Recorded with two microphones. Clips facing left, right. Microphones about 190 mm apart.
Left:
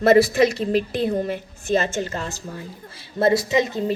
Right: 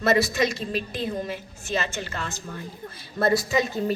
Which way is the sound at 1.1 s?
55° left (ahead or behind).